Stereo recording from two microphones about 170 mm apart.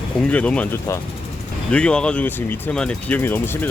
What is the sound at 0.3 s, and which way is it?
Speech, 5° left (ahead or behind).